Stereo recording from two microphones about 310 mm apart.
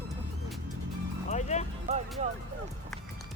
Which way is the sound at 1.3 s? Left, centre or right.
Left.